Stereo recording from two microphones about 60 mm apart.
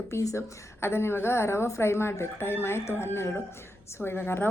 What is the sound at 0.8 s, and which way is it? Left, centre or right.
A woman's voice, left.